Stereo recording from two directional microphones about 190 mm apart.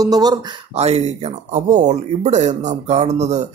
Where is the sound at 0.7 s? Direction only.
35° right (ahead or behind).